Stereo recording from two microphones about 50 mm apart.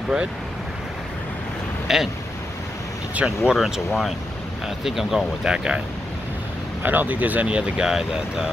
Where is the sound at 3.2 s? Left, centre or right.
Right.